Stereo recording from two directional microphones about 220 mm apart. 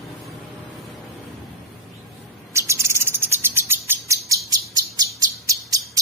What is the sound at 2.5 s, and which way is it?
Bird, 10° right (ahead or behind).